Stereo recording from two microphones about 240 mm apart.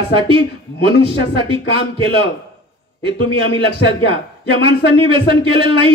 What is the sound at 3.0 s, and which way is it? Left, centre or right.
Speech, right.